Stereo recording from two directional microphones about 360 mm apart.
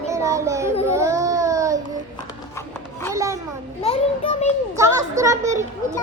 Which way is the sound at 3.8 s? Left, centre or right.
Centre.